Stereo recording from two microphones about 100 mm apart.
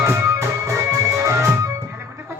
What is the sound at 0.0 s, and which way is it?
Music, 30° right (ahead or behind).